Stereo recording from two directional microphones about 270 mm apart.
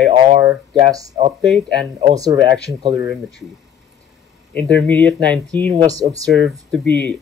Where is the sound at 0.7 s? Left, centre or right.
Right.